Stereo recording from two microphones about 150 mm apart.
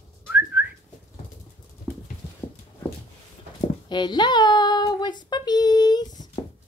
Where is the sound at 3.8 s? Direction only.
30° left (ahead or behind).